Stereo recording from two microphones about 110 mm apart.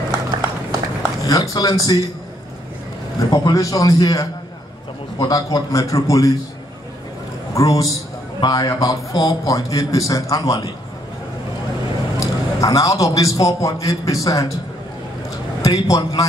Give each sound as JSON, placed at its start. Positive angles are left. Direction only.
{"t": 1.2, "sound": "a man's voice", "side_deg": 35}
{"t": 3.2, "sound": "a man's voice", "side_deg": 40}
{"t": 7.5, "sound": "a man's voice", "side_deg": 30}
{"t": 12.2, "sound": "a man's voice", "side_deg": 30}
{"t": 15.6, "sound": "a man's voice", "side_deg": 35}